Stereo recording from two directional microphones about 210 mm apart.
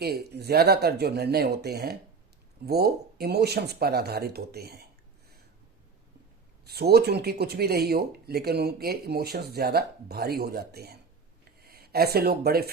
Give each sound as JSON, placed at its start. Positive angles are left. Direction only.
{"t": 0.0, "sound": "speech", "side_deg": -50}
{"t": 6.7, "sound": "speech", "side_deg": -50}